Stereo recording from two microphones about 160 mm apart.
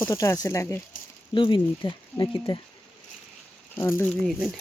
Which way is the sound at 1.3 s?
30° left (ahead or behind).